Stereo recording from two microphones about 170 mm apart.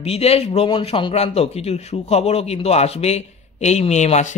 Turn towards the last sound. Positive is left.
turn(degrees=40)  # may be behind; listen again after turning